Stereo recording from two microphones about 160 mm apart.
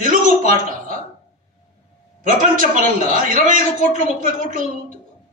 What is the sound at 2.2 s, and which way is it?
A man's voice, 60° right (ahead or behind).